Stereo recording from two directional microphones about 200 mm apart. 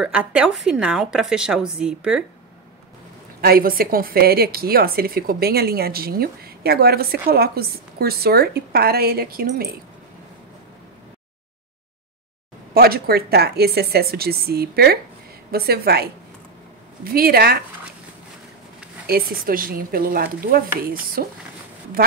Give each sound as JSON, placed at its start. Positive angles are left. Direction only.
{"t": 0.0, "sound": "a woman's voice", "side_deg": -5}
{"t": 3.3, "sound": "a woman's voice", "side_deg": -50}
{"t": 12.7, "sound": "a woman's voice", "side_deg": -50}
{"t": 19.0, "sound": "a woman's voice", "side_deg": -45}